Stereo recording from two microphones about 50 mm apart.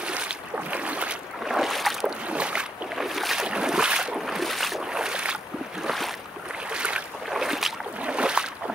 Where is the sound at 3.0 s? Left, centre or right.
Centre.